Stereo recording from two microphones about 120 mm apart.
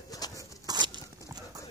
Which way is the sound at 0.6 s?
35° right (ahead or behind).